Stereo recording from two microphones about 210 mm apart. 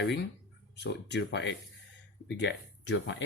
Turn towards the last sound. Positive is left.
turn(degrees=55)  # may be behind; listen again after turning